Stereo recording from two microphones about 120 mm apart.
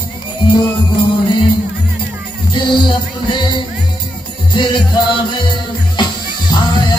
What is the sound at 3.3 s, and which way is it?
Music, 40° left (ahead or behind).